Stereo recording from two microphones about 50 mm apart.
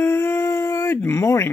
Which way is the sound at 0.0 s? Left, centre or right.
Left.